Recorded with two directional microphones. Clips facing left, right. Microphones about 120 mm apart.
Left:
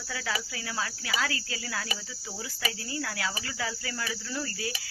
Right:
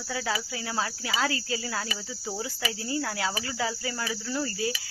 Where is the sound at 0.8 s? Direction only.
30° right (ahead or behind).